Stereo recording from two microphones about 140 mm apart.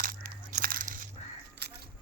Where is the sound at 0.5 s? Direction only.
80° right.